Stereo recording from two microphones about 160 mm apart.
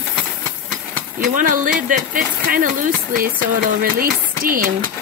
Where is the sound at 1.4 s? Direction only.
55° right (ahead or behind).